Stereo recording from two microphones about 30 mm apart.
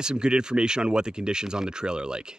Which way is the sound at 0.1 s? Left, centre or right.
Right.